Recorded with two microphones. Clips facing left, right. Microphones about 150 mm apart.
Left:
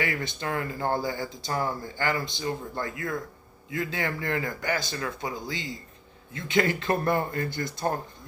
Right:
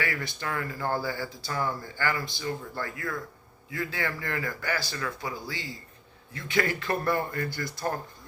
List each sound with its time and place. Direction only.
0.0 s speech: 20° left (ahead or behind)